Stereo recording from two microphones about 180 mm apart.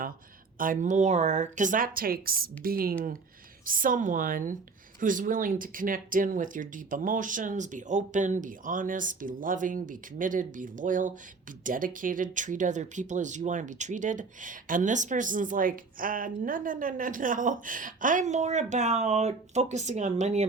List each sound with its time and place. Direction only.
0.6 s speech: 45° right (ahead or behind)